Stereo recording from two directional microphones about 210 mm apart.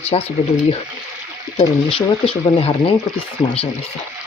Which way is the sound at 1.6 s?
25° left (ahead or behind).